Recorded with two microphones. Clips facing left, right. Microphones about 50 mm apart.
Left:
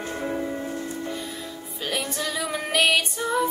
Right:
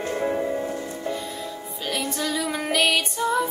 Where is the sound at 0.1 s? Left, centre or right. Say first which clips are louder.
Right 4 dB; centre.